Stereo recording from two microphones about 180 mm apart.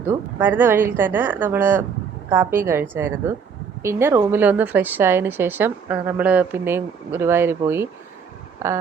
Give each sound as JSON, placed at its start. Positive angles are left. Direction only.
{"t": 0.3, "sound": "a woman's voice", "side_deg": -10}